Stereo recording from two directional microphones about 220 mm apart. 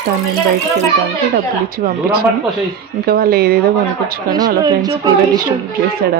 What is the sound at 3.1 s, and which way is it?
Speech, 45° right (ahead or behind).